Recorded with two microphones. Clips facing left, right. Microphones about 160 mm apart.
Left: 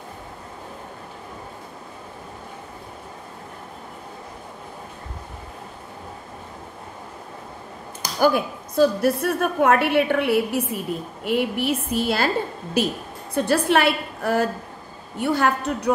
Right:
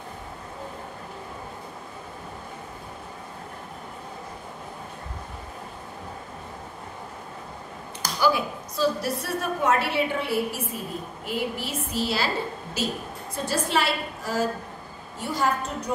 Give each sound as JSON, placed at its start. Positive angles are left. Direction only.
{"t": 8.2, "sound": "a woman's voice", "side_deg": 55}